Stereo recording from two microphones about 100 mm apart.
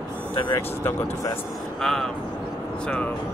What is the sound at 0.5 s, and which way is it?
Speech, 20° left (ahead or behind).